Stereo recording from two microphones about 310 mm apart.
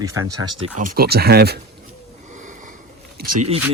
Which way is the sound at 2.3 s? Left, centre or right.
Right.